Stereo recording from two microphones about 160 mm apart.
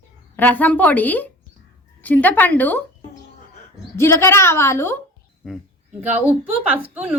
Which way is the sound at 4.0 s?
15° left (ahead or behind).